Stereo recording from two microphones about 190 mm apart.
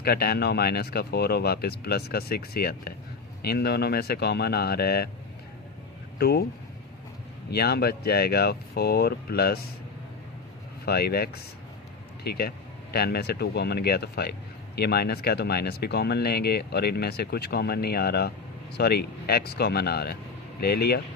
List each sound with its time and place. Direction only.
0.0 s speech: 55° left (ahead or behind)
6.1 s speech: 55° left (ahead or behind)
7.5 s speech: 55° left (ahead or behind)
10.8 s speech: 55° left (ahead or behind)